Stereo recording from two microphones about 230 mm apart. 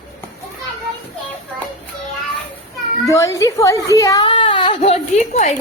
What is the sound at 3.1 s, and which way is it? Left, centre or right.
A woman's voice, centre.